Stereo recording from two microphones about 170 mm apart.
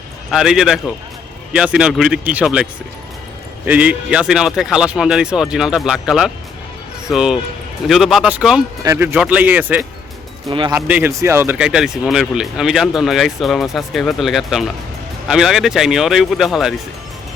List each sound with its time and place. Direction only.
0.3 s speech: centre (ahead or behind)
3.7 s speech: 10° right (ahead or behind)
8.8 s speech: 15° right (ahead or behind)